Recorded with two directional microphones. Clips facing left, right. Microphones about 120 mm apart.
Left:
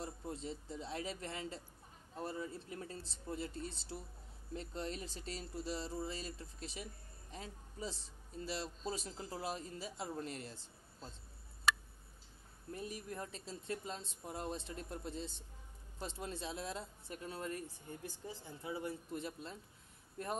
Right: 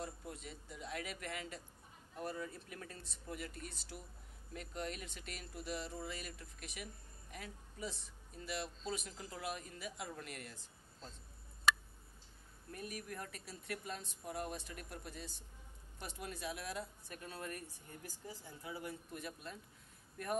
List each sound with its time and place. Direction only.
0.0 s speech: 25° left (ahead or behind)
12.7 s speech: 25° left (ahead or behind)